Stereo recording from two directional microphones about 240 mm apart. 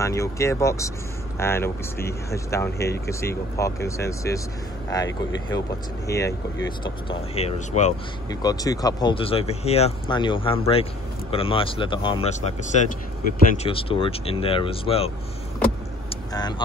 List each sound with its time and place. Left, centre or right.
0.0 s speech: centre
6.8 s speech: left
8.3 s speech: centre
16.3 s speech: centre